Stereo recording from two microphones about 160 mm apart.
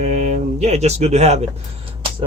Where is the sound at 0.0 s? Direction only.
45° right (ahead or behind).